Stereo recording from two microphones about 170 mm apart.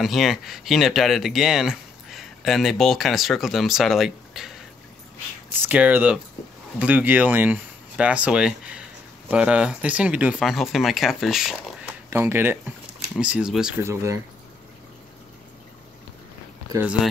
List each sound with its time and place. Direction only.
0.0 s speech: centre (ahead or behind)
5.7 s speech: 10° right (ahead or behind)
12.1 s speech: 15° right (ahead or behind)
13.8 s speech: 20° right (ahead or behind)